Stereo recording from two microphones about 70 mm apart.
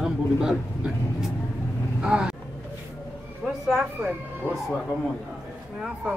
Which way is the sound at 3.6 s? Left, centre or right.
Centre.